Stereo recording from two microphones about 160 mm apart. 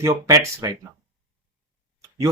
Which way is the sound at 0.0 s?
20° right (ahead or behind).